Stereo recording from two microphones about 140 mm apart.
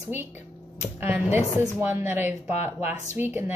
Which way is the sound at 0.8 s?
15° right (ahead or behind).